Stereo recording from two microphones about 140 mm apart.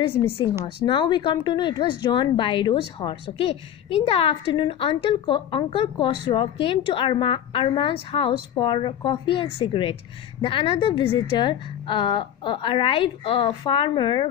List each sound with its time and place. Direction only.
0.0 s a woman's voice: 40° left (ahead or behind)